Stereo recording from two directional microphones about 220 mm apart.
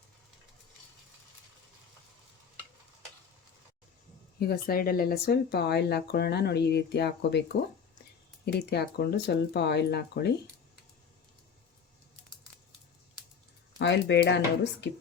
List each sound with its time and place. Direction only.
4.4 s speech: 45° left (ahead or behind)
13.7 s speech: 55° left (ahead or behind)